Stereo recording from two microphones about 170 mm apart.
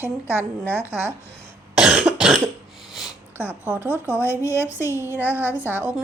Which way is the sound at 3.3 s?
10° right (ahead or behind).